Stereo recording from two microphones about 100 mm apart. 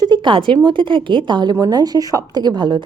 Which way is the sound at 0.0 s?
50° right (ahead or behind).